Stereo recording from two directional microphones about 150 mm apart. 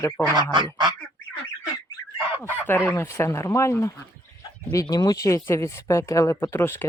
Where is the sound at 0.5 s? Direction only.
30° right (ahead or behind).